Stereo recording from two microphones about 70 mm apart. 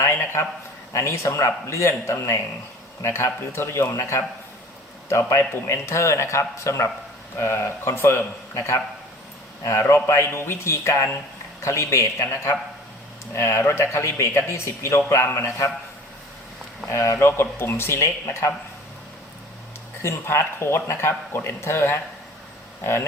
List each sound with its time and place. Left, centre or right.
0.0 s a sound: left
0.9 s a man's voice: left
16.9 s speech: left
20.0 s speech: left